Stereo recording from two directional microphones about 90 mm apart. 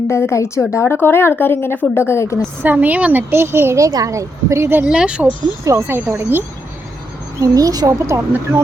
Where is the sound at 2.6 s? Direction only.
20° right (ahead or behind).